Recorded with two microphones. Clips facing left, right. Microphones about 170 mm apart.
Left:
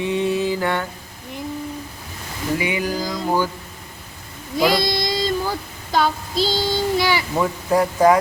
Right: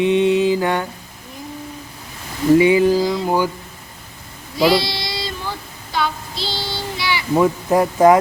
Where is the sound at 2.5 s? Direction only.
25° right (ahead or behind).